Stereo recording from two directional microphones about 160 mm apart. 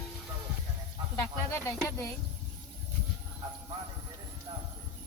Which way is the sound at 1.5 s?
15° left (ahead or behind).